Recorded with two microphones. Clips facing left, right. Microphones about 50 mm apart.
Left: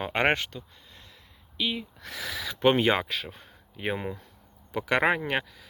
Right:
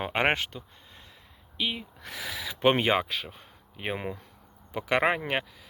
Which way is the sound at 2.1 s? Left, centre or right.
Centre.